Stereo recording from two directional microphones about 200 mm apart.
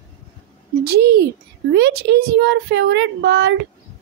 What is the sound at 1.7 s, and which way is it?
A woman's voice, 55° right (ahead or behind).